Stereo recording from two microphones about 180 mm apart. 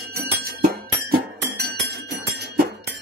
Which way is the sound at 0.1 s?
55° right (ahead or behind).